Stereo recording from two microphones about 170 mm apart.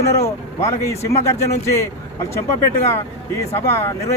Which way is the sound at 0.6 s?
15° left (ahead or behind).